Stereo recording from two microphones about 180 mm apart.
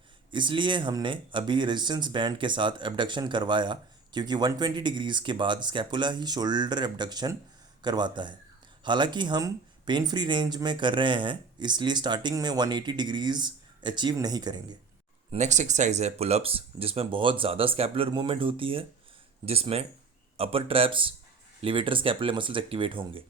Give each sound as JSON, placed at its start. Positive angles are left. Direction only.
{"t": 0.3, "sound": "speech", "side_deg": -25}
{"t": 15.3, "sound": "speech", "side_deg": -40}